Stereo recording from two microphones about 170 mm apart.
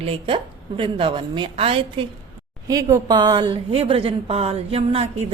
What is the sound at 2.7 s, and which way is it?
A woman's voice, 20° right (ahead or behind).